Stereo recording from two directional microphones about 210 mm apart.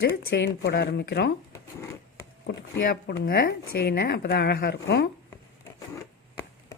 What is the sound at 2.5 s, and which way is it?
Speech, 55° left (ahead or behind).